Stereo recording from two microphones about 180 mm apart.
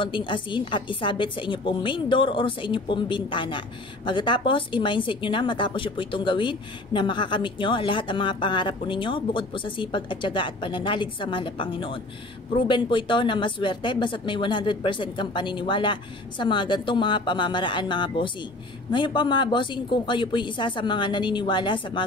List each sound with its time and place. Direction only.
0.0 s a woman's voice: 25° left (ahead or behind)